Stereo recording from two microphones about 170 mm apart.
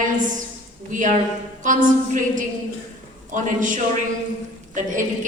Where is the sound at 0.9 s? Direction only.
50° right (ahead or behind).